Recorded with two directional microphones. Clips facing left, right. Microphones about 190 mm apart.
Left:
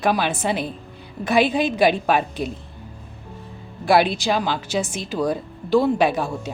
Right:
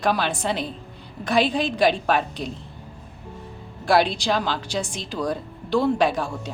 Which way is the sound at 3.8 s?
5° left (ahead or behind).